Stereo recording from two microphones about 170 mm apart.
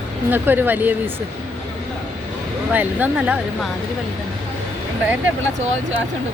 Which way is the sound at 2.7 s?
10° right (ahead or behind).